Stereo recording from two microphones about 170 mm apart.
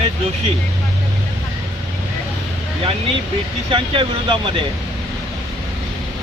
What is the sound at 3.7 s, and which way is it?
Speech, 30° right (ahead or behind).